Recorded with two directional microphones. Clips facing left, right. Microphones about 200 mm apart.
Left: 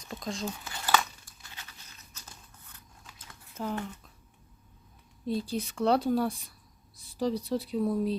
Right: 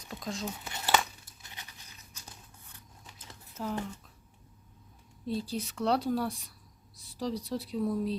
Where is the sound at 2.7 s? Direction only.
20° right (ahead or behind).